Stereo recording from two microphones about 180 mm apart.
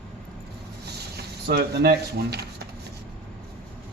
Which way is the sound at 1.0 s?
60° right (ahead or behind).